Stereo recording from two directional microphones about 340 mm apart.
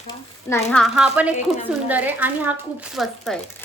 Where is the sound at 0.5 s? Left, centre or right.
Centre.